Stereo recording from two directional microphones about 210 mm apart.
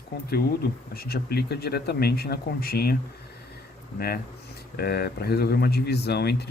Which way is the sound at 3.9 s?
45° left (ahead or behind).